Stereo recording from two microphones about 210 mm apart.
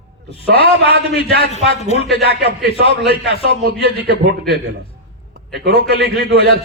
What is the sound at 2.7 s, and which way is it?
Speech, 60° right (ahead or behind).